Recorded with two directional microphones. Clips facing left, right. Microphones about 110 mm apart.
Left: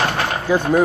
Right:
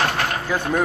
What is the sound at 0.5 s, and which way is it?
Speech, 15° left (ahead or behind).